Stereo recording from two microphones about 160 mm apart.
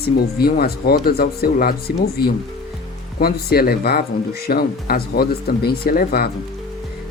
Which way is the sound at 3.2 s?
70° left (ahead or behind).